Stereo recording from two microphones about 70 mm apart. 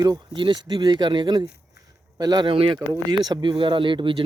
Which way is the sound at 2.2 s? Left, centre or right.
Right.